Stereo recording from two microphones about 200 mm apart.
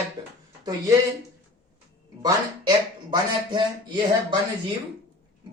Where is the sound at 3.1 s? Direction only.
25° right (ahead or behind).